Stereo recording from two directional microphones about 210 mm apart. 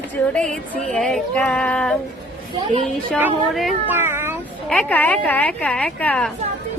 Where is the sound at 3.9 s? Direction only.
10° right (ahead or behind).